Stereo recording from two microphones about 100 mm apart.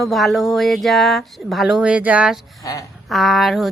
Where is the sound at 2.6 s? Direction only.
35° left (ahead or behind).